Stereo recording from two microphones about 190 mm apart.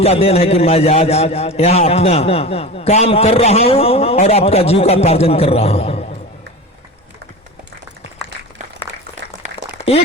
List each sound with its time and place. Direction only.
0.0 s a man's voice: 30° left (ahead or behind)